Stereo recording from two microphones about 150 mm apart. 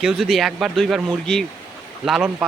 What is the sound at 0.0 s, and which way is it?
Speech, centre (ahead or behind).